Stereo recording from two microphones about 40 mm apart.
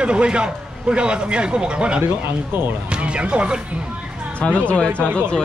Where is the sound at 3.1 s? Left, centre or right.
Right.